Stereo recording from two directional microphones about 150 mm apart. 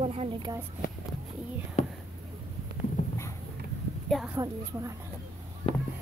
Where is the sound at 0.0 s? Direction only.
40° right (ahead or behind).